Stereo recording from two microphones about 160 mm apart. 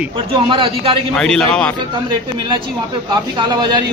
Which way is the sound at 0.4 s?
30° right (ahead or behind).